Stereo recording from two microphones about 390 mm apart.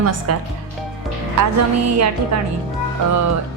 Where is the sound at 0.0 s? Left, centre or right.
Right.